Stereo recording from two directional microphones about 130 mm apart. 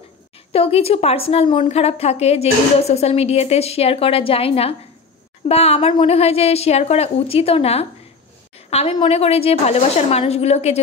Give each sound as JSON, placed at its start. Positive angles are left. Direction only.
{"t": 0.5, "sound": "a woman's voice", "side_deg": 50}